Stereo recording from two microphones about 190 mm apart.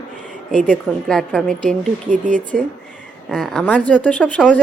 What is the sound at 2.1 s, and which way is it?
Speech, 40° right (ahead or behind).